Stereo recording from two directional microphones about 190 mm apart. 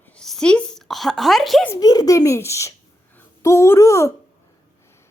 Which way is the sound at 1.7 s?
20° left (ahead or behind).